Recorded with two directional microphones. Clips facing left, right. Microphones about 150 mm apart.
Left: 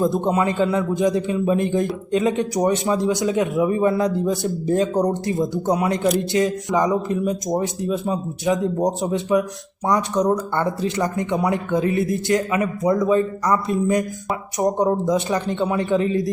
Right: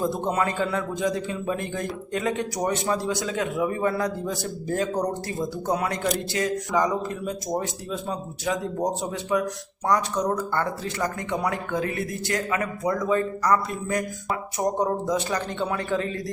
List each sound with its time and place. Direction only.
0.0 s a man's voice: 20° left (ahead or behind)